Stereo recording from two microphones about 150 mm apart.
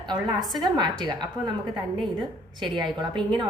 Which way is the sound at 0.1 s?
25° right (ahead or behind).